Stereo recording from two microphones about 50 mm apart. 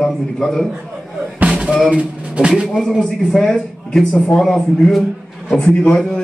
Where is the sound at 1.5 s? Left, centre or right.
Centre.